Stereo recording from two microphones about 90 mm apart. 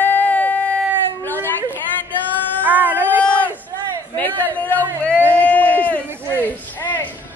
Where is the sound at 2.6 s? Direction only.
20° right (ahead or behind).